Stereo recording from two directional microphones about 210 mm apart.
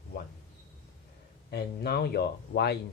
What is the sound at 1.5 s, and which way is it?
Speech, 50° left (ahead or behind).